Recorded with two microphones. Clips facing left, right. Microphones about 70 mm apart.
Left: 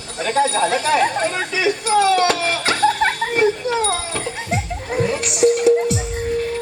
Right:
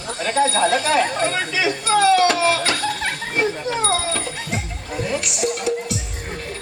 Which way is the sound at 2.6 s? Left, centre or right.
Left.